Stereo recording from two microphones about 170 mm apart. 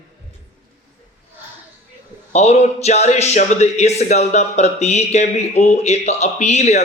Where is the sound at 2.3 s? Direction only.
40° left (ahead or behind).